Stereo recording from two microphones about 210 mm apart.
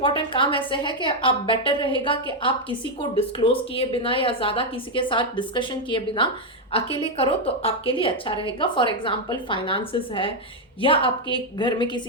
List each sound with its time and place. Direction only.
0.0 s a woman's voice: 25° left (ahead or behind)